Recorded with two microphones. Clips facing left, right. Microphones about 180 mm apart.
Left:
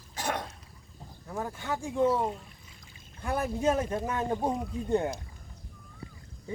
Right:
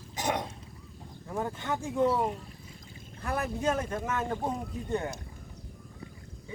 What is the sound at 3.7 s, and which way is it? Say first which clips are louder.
Speech: left 2 dB; 10° left (ahead or behind).